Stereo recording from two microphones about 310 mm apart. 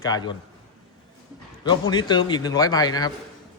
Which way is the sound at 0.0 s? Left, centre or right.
Centre.